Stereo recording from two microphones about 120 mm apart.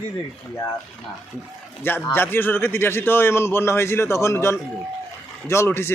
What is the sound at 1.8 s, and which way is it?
A man's voice, 15° left (ahead or behind).